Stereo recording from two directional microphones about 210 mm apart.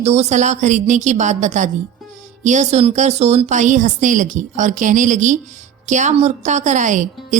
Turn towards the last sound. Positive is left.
turn(degrees=-35)  # may be behind; listen again after turning